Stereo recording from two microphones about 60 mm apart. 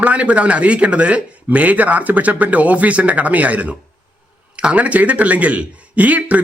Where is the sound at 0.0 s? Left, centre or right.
Right.